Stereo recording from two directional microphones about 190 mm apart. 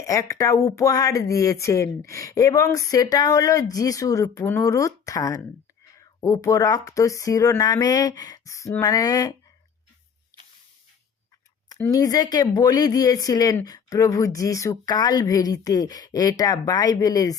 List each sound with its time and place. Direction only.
0.0 s speech: 15° left (ahead or behind)
11.7 s speech: 20° left (ahead or behind)